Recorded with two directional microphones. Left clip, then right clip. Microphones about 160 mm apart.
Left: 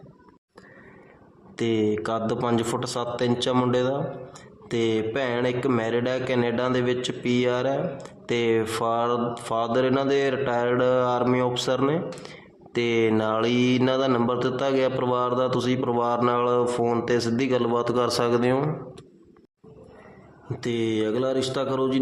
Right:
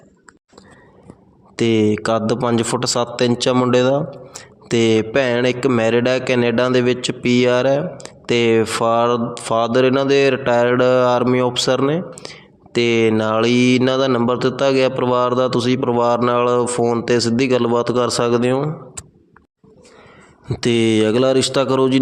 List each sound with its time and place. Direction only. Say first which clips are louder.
1.5 s a man's voice: right 7 dB; 40° right (ahead or behind)
20.5 s speech: right 10 dB; 50° right (ahead or behind)